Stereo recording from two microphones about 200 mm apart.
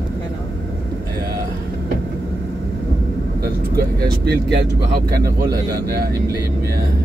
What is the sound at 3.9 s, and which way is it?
Speech, 55° right (ahead or behind).